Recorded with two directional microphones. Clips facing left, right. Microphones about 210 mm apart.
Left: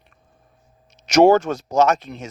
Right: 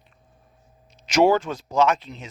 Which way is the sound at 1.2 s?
45° left (ahead or behind).